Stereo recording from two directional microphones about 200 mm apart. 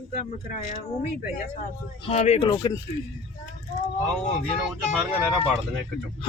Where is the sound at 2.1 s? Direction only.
30° left (ahead or behind).